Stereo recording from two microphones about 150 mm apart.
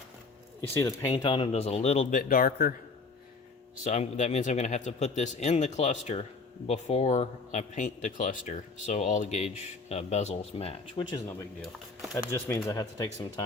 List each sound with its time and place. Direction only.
0.7 s speech: 20° left (ahead or behind); by 2.7 s 75° left (ahead or behind)
3.8 s speech: 50° left (ahead or behind)
12.1 s speech: 20° left (ahead or behind)